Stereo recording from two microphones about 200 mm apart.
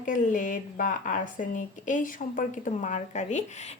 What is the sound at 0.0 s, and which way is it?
Speech, 40° left (ahead or behind).